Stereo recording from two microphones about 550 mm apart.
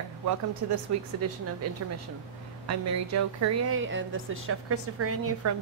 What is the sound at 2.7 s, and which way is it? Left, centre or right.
Speech, right.